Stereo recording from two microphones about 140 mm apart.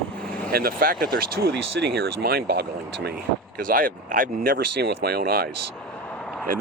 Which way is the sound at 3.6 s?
85° right.